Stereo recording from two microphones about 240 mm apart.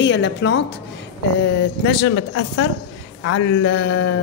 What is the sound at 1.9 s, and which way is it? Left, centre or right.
A woman's voice, left.